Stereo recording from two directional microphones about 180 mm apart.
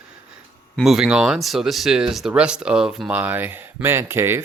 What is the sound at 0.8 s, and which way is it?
Speech, centre (ahead or behind).